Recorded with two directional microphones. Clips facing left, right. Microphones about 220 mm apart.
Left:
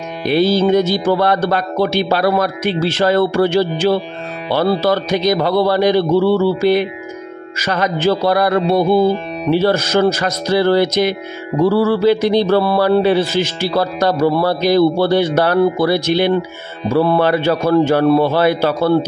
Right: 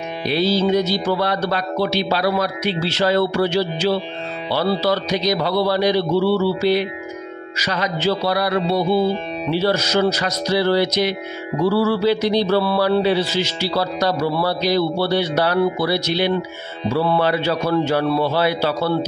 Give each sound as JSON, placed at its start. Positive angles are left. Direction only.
{"t": 0.2, "sound": "a man's voice", "side_deg": 50}